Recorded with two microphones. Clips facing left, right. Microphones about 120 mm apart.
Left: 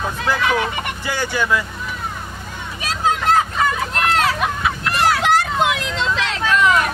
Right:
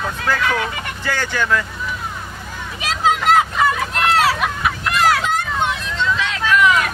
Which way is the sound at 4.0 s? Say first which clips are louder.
Right 2 dB; 5° right (ahead or behind).